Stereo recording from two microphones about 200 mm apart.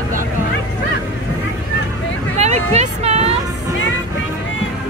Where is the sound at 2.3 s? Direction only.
35° right (ahead or behind).